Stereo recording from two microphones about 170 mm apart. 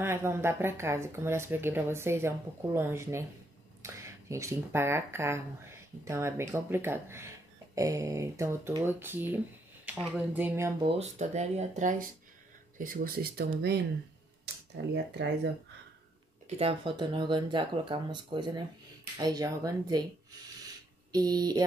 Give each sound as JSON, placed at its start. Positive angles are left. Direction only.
{"t": 0.0, "sound": "speech", "side_deg": -15}
{"t": 10.8, "sound": "speech", "side_deg": -30}
{"t": 11.1, "sound": "speech", "side_deg": -45}
{"t": 14.8, "sound": "speech", "side_deg": -90}
{"t": 16.4, "sound": "speech", "side_deg": -35}
{"t": 21.1, "sound": "speech", "side_deg": -20}